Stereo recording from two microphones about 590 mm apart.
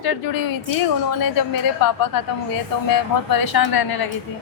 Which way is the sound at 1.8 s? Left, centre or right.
Left.